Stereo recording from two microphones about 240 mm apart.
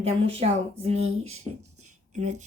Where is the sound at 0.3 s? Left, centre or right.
Right.